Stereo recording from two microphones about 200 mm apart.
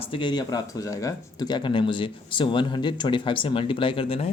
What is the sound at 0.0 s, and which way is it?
Speech, 25° left (ahead or behind).